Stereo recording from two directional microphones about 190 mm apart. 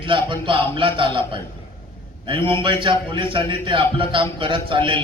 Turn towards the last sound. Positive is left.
turn(degrees=-25)  # may be behind; listen again after turning